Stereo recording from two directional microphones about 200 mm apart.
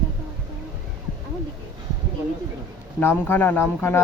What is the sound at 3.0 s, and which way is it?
Speech, 10° left (ahead or behind).